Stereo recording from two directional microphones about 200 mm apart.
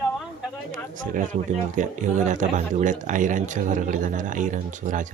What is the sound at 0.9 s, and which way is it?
Speech, 40° right (ahead or behind).